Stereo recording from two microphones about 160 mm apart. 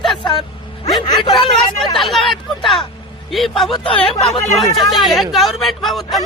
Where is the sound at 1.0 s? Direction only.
25° left (ahead or behind).